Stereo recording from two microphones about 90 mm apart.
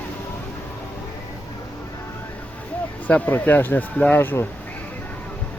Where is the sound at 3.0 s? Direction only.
15° left (ahead or behind).